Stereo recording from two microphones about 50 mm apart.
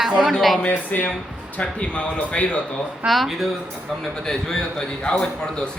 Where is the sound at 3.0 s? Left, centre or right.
Centre.